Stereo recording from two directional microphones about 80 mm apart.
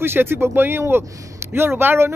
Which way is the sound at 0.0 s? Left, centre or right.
Right.